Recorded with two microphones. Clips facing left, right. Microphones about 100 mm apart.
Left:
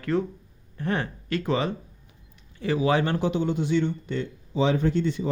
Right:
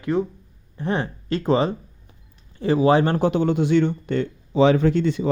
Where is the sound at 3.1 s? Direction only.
55° right (ahead or behind); by 5.3 s 80° right.